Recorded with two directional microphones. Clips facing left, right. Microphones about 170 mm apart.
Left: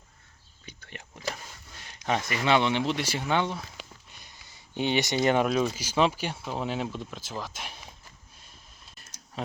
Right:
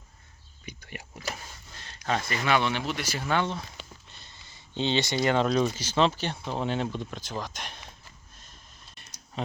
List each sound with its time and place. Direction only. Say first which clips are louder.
0.6 s a sound: right 3 dB; 15° right (ahead or behind)
1.7 s speech: left 1 dB; 15° left (ahead or behind)
9.0 s clicking: right 1 dB; 5° left (ahead or behind)